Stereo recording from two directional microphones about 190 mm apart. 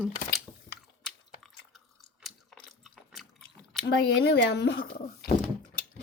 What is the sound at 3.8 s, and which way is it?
Speech, 60° left (ahead or behind).